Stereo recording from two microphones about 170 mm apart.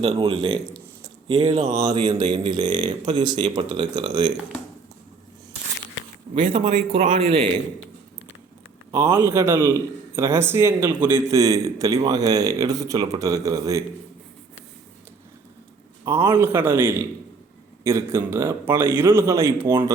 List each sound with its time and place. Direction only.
0.0 s speech: 30° right (ahead or behind)
1.7 s a man's voice: 25° right (ahead or behind)
6.5 s speech: 35° right (ahead or behind)
8.9 s a man's voice: 15° right (ahead or behind)
16.0 s a man's voice: 15° right (ahead or behind)